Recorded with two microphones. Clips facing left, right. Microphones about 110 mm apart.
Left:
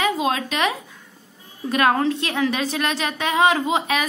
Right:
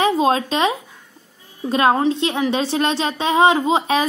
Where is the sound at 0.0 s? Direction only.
30° right (ahead or behind).